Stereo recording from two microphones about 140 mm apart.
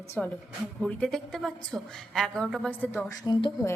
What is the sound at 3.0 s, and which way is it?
Speech, 30° left (ahead or behind).